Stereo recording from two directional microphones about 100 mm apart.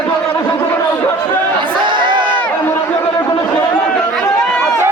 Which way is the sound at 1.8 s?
55° right (ahead or behind).